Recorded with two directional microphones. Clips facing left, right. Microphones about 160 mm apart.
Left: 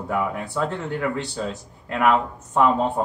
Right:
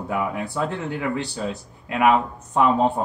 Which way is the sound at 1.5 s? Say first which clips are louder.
Right 1 dB; 10° right (ahead or behind).